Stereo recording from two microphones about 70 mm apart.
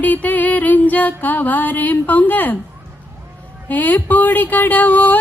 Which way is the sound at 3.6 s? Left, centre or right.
Left.